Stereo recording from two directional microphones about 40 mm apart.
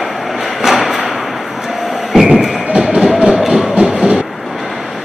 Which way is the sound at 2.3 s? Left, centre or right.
Centre.